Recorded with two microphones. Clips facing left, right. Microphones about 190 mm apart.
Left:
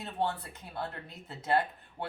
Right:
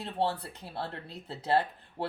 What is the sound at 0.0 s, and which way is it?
Speech, 30° right (ahead or behind).